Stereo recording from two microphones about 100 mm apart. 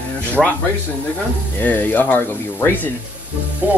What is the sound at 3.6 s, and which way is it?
Music, 20° right (ahead or behind).